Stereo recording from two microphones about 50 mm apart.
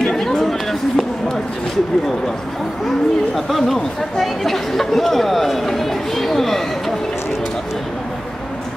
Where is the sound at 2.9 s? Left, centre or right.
Centre.